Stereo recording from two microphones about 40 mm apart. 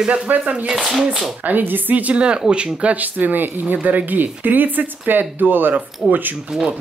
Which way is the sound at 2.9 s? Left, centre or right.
Right.